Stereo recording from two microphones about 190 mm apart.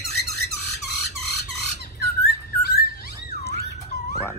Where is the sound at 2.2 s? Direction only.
60° left (ahead or behind).